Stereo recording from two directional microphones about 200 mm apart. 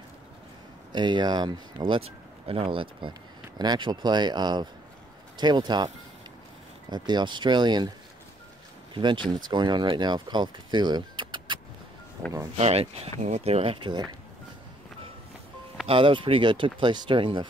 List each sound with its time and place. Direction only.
0.9 s speech: 20° right (ahead or behind)
6.9 s speech: 20° right (ahead or behind)
8.9 s speech: 25° right (ahead or behind)
15.9 s speech: 25° right (ahead or behind)